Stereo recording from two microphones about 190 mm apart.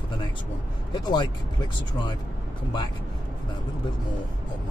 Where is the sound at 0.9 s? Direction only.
20° left (ahead or behind).